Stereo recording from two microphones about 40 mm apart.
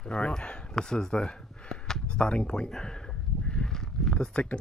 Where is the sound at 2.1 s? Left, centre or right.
Left.